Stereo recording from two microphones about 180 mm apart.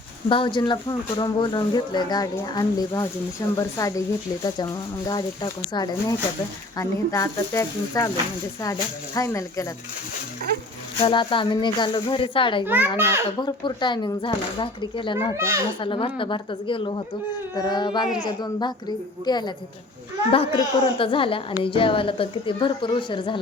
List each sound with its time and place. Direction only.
0.3 s speech: 25° left (ahead or behind)
5.0 s speech: 25° left (ahead or behind)
11.0 s speech: 30° left (ahead or behind)
12.6 s a child's voice: 10° right (ahead or behind)
13.4 s speech: 25° left (ahead or behind)
15.4 s a child's voice: 15° right (ahead or behind)
15.8 s a child's voice: 30° left (ahead or behind)